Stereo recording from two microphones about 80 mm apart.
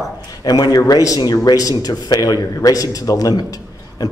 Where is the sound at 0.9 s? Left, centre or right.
Left.